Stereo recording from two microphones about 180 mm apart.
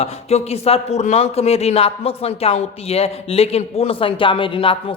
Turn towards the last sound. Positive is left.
turn(degrees=30)  # may be behind; listen again after turning